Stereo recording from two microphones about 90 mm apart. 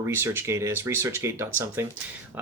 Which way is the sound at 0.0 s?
25° right (ahead or behind).